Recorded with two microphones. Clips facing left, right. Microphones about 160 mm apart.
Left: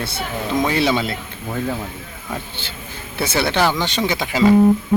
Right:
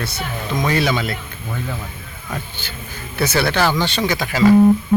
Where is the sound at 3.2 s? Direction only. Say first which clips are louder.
Right 1 dB; 25° left (ahead or behind).